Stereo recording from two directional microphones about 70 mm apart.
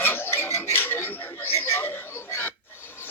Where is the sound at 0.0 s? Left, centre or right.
Left.